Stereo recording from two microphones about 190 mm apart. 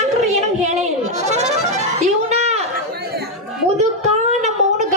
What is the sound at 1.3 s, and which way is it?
Accordion, 35° right (ahead or behind).